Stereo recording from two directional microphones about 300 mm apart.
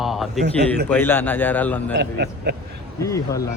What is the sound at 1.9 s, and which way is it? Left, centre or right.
Speech, right.